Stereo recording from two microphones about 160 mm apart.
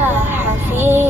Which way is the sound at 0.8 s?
15° right (ahead or behind).